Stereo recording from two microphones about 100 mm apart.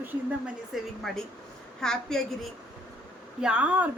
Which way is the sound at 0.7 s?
Centre (ahead or behind).